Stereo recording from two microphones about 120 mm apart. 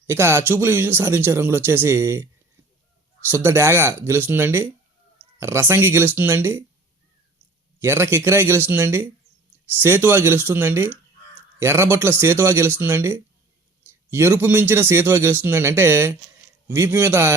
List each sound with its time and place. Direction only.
0.1 s a man's voice: 20° right (ahead or behind)
7.8 s a man's voice: 20° right (ahead or behind)